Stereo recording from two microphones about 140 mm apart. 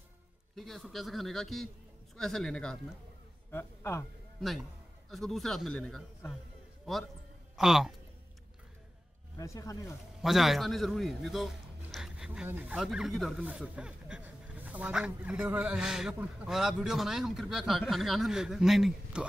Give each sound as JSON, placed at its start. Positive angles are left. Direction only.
{"t": 0.6, "sound": "speech", "side_deg": 0}
{"t": 3.5, "sound": "a man's voice", "side_deg": 20}
{"t": 5.1, "sound": "speech", "side_deg": 0}
{"t": 7.5, "sound": "speech", "side_deg": -5}
{"t": 9.4, "sound": "speech", "side_deg": 25}
{"t": 10.2, "sound": "a man's voice", "side_deg": 0}
{"t": 12.7, "sound": "speech", "side_deg": -5}